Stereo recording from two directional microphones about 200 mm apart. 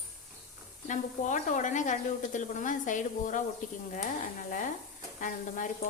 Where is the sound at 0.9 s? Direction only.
40° left (ahead or behind).